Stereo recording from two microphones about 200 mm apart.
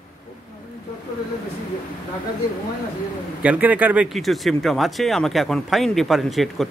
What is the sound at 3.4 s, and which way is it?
Speech, 5° right (ahead or behind).